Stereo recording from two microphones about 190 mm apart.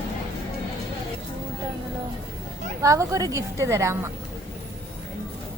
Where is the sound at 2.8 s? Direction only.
15° right (ahead or behind).